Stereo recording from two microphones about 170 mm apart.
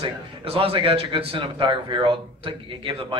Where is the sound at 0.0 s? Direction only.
35° right (ahead or behind).